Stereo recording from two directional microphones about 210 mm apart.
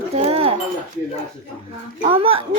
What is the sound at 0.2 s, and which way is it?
Livestock, 30° right (ahead or behind).